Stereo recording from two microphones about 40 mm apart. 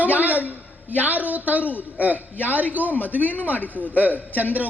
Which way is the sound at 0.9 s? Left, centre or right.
Right.